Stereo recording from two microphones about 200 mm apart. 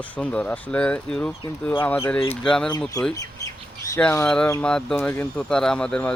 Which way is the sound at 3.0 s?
15° left (ahead or behind).